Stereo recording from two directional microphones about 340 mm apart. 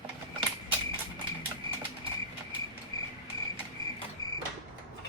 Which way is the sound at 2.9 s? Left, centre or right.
Centre.